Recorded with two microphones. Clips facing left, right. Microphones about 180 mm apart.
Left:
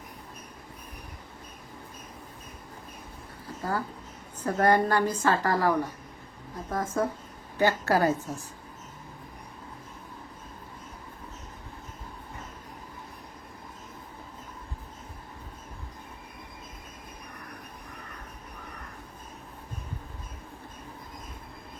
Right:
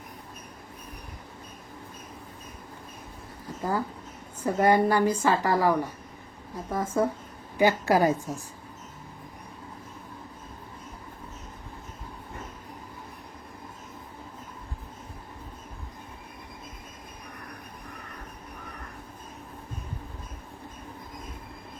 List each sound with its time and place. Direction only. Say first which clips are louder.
3.6 s a woman's voice: right 2 dB; 15° right (ahead or behind)